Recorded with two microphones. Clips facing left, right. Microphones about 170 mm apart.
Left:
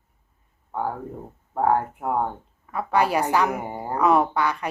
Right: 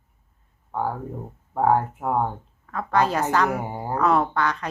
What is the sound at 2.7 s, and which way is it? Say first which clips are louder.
A woman's voice: even; 10° left (ahead or behind).